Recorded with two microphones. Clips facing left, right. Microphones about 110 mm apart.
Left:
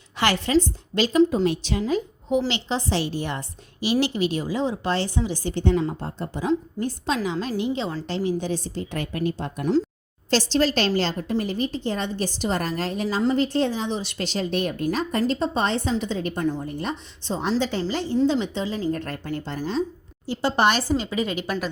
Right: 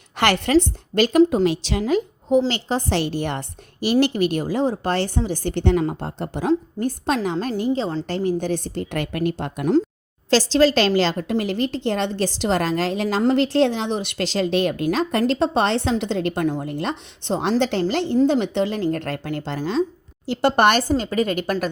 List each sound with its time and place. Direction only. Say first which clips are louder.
0.2 s a woman's voice: right 3 dB; 60° right (ahead or behind)
1.5 s a woman's voice: right 2 dB; 90° right
2.5 s a woman's voice: right 3 dB; 45° right (ahead or behind); by 6.5 s 65° right (ahead or behind)
6.5 s a woman's voice: right 4 dB; 50° right (ahead or behind)
8.0 s a woman's voice: right 3 dB; 50° right (ahead or behind); by 9.6 s 70° right (ahead or behind)
10.2 s a woman's voice: right 5 dB; 90° right; by 18.2 s 70° right (ahead or behind)
18.2 s a woman's voice: right 4 dB; 55° right (ahead or behind); by 19.8 s 90° right
20.2 s a woman's voice: right 4 dB; 65° right (ahead or behind); by 21.7 s 50° right (ahead or behind)